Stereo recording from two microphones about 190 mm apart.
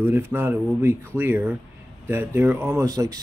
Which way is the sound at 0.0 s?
10° right (ahead or behind).